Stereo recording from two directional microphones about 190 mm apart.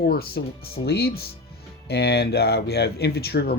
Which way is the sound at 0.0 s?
55° left (ahead or behind).